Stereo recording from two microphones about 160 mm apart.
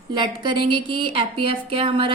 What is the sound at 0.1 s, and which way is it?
A woman's voice, 30° right (ahead or behind).